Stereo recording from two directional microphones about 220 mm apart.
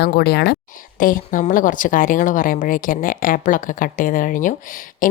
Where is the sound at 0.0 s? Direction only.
45° left (ahead or behind).